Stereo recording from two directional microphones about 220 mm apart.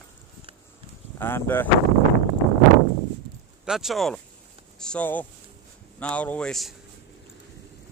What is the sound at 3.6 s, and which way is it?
Speech, centre (ahead or behind).